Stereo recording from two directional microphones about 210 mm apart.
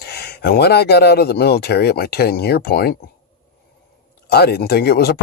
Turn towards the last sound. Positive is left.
turn(degrees=50)  # may be behind; listen again after turning